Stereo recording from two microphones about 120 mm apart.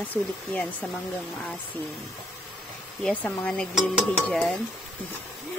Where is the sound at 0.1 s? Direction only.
15° left (ahead or behind).